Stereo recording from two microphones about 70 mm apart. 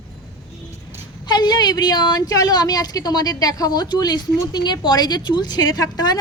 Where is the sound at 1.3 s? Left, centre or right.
Left.